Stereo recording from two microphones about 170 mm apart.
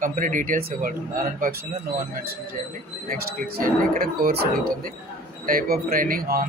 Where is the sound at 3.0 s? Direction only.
60° right (ahead or behind).